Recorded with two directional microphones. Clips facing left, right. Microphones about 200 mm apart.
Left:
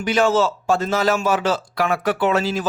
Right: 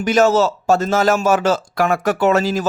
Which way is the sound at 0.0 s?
45° right (ahead or behind).